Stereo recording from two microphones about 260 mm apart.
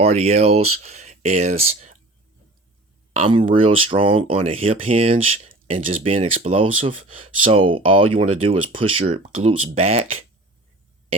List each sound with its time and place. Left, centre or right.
0.0 s speech: right
3.1 s speech: right